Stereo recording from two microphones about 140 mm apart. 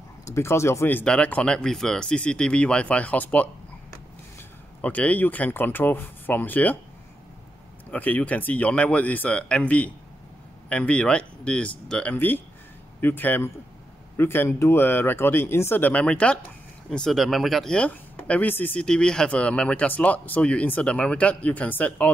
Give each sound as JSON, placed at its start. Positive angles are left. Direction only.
{"t": 0.2, "sound": "speech", "side_deg": 20}
{"t": 4.8, "sound": "speech", "side_deg": 10}
{"t": 7.9, "sound": "speech", "side_deg": 10}